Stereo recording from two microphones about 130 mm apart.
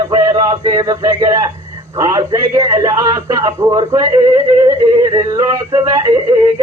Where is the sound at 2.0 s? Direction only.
25° right (ahead or behind).